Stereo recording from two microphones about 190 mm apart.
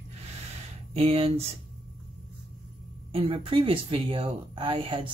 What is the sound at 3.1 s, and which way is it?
Speech, 30° right (ahead or behind).